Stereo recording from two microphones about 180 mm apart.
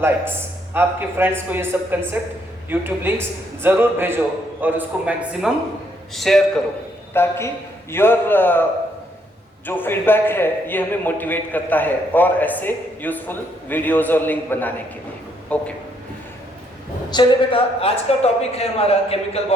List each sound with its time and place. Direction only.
0.7 s a man's voice: 10° right (ahead or behind)
7.1 s a man's voice: 15° left (ahead or behind)
9.6 s a man's voice: 10° left (ahead or behind)
17.1 s speech: 25° left (ahead or behind)